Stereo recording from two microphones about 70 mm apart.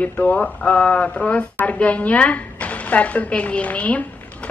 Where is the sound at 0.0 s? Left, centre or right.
Left.